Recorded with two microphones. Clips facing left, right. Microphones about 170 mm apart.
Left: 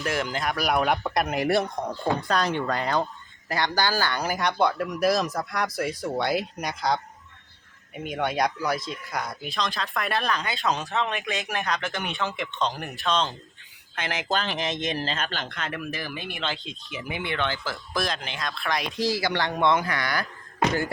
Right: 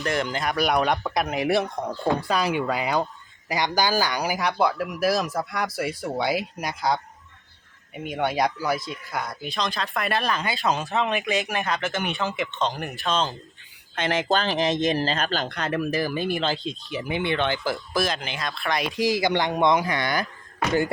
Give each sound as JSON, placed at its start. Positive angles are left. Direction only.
{"t": 0.0, "sound": "speech", "side_deg": 5}
{"t": 13.9, "sound": "speech", "side_deg": -25}
{"t": 17.2, "sound": "speech", "side_deg": -20}
{"t": 17.9, "sound": "speech", "side_deg": 0}
{"t": 18.9, "sound": "speech", "side_deg": -20}